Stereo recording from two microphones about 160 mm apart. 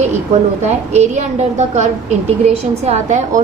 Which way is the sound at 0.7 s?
45° right (ahead or behind).